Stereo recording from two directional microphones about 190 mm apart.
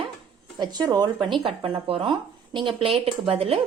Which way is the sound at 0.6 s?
20° right (ahead or behind).